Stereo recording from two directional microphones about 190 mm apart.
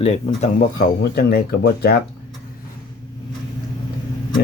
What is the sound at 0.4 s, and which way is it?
Speech, 50° left (ahead or behind).